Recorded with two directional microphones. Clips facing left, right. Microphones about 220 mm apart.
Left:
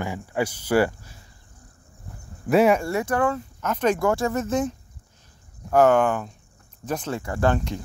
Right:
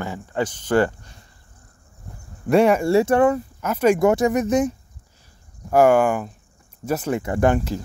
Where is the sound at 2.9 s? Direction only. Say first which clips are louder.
Right 7 dB; 25° right (ahead or behind).